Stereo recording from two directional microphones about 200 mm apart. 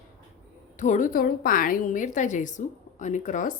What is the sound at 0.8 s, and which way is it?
A woman's voice, 40° left (ahead or behind).